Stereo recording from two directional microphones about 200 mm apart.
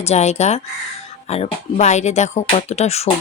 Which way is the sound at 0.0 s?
35° left (ahead or behind).